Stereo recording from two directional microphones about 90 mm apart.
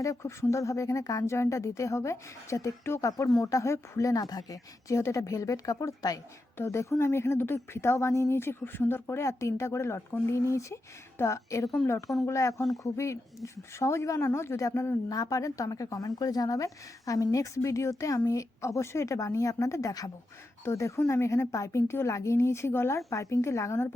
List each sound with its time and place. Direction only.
0.0 s speech: 35° left (ahead or behind)
15.1 s speech: 40° left (ahead or behind)